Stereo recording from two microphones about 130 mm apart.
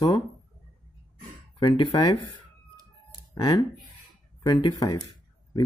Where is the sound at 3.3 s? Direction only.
35° left (ahead or behind).